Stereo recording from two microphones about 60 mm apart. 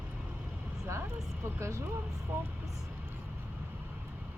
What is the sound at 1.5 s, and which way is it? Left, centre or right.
Speech, right.